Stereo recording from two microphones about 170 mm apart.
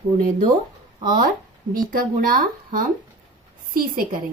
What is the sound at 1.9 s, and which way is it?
Speech, 55° right (ahead or behind).